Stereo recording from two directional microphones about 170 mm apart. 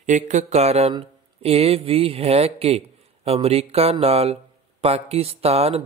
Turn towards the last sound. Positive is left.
turn(degrees=-35)  # may be behind; listen again after turning